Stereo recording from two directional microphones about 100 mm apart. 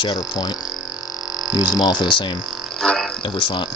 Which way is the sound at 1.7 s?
45° left (ahead or behind).